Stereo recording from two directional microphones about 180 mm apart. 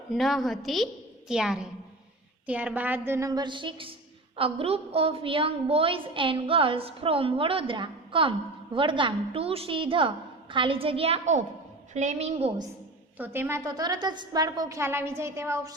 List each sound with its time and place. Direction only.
0.1 s a woman's voice: centre (ahead or behind); by 12.5 s 40° right (ahead or behind)
13.1 s a woman's voice: 10° right (ahead or behind)